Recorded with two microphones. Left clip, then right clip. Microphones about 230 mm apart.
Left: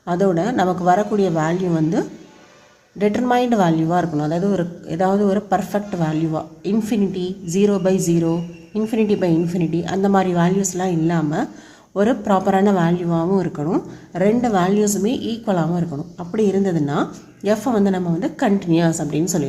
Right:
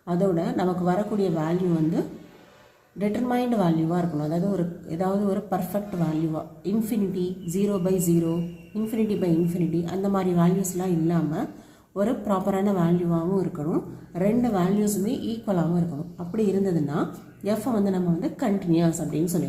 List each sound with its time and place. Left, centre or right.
0.0 s a woman's voice: left